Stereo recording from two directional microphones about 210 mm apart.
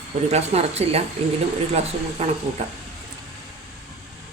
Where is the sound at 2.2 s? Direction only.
30° right (ahead or behind).